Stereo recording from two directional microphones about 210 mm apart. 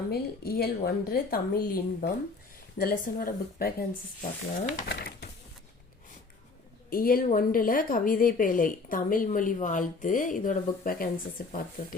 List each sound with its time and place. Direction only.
0.1 s a woman's voice: 45° left (ahead or behind)
4.9 s a sound: 50° left (ahead or behind)
6.9 s a woman's voice: 45° left (ahead or behind)